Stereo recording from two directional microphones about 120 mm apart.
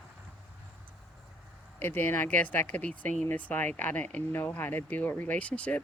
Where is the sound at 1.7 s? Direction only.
20° left (ahead or behind).